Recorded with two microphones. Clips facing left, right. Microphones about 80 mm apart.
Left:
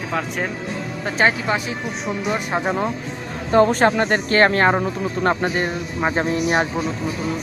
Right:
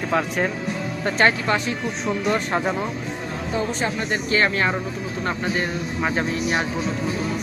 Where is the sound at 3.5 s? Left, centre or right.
Left.